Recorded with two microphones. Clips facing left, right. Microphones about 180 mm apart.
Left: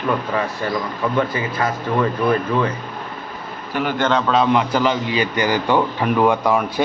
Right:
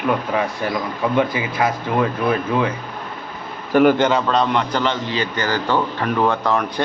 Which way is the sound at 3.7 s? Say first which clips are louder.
Right 10 dB; 50° right (ahead or behind).